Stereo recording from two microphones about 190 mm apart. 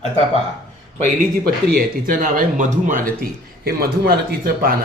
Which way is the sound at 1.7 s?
45° right (ahead or behind).